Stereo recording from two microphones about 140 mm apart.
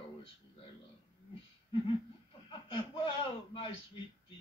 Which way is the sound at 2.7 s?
40° left (ahead or behind).